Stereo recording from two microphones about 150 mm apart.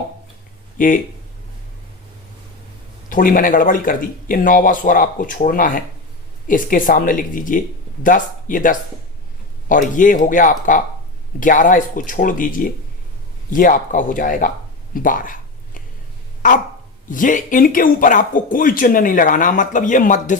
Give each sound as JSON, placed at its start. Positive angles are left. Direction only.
{"t": 0.8, "sound": "speech", "side_deg": 65}
{"t": 3.1, "sound": "speech", "side_deg": 65}
{"t": 9.9, "sound": "speech", "side_deg": 60}
{"t": 14.9, "sound": "a sound", "side_deg": 65}
{"t": 16.4, "sound": "speech", "side_deg": 60}